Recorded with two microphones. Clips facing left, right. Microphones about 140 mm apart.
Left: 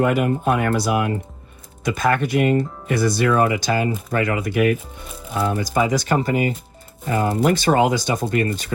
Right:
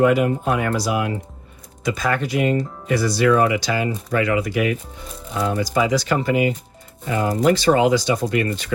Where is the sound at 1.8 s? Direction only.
55° left (ahead or behind).